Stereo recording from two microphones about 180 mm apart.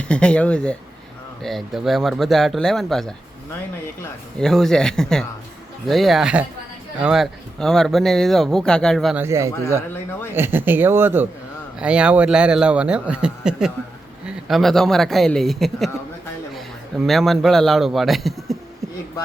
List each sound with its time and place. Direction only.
0.1 s speech: 5° left (ahead or behind)
4.4 s speech: centre (ahead or behind)
9.1 s speech: 15° right (ahead or behind); by 15.9 s centre (ahead or behind)
17.0 s speech: centre (ahead or behind)